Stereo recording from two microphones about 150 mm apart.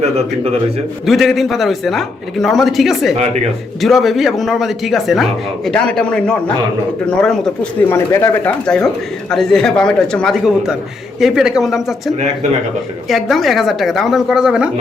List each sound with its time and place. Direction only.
1.0 s a man's voice: centre (ahead or behind)
7.9 s a man's voice: 20° left (ahead or behind)
8.6 s a man's voice: 5° left (ahead or behind)